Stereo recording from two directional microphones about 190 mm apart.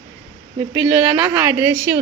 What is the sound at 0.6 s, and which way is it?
Speech, 10° right (ahead or behind).